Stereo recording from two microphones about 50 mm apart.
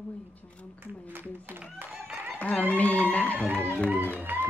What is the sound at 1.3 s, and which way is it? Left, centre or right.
Speech, right.